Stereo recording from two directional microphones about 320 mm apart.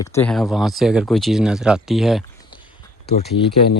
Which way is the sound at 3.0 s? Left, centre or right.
Left.